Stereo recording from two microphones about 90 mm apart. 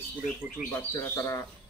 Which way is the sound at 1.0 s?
35° left (ahead or behind).